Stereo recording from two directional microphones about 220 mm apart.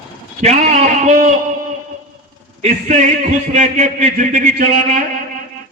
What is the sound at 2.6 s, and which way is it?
A man's voice, 30° right (ahead or behind).